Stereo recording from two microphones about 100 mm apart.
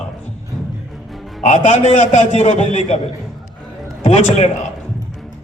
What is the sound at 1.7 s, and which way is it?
A man's voice, 90° left.